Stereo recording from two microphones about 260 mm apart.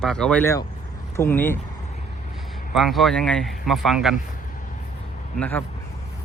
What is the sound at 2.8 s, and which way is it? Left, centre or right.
Speech, centre.